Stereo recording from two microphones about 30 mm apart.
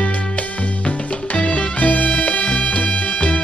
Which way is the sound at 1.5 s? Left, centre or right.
Left.